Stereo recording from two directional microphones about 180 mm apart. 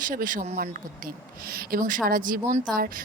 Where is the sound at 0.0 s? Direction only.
50° right (ahead or behind).